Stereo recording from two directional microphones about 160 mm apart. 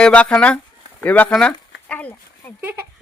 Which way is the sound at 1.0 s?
10° left (ahead or behind).